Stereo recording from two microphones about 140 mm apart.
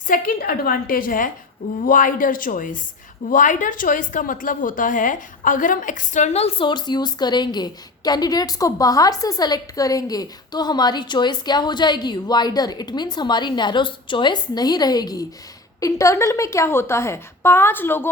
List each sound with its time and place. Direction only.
0.1 s a woman's voice: 90° left; by 18.1 s 15° left (ahead or behind)